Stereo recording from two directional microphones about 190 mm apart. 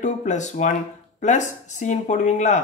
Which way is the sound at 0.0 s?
40° left (ahead or behind).